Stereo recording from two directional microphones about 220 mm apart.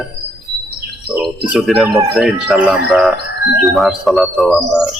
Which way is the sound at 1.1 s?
Centre (ahead or behind).